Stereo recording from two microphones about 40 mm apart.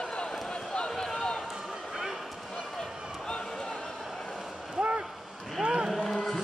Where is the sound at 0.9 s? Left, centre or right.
Centre.